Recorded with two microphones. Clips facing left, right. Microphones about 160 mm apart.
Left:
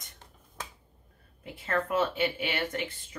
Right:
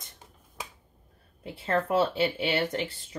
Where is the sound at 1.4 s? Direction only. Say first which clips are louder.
Right 3 dB; 30° right (ahead or behind).